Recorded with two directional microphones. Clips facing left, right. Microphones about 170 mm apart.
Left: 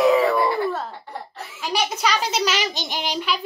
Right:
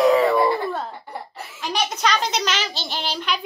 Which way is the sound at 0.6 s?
Centre (ahead or behind).